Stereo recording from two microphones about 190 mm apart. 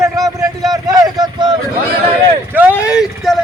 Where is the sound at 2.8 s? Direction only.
5° right (ahead or behind).